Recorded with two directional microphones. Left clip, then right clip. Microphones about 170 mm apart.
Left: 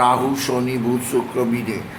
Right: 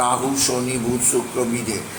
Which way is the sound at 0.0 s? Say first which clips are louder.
Left 3 dB; 15° left (ahead or behind).